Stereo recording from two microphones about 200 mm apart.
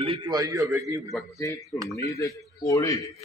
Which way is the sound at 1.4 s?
15° left (ahead or behind).